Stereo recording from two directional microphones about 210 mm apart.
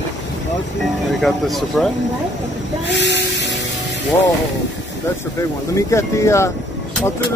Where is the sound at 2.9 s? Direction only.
55° right (ahead or behind).